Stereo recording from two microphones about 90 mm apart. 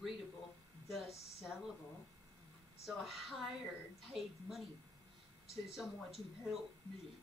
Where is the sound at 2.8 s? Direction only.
Centre (ahead or behind).